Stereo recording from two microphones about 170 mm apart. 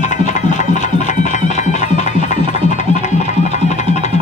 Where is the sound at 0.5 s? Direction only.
45° left (ahead or behind).